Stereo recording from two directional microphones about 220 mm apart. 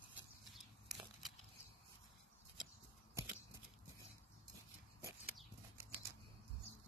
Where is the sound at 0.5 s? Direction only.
Centre (ahead or behind).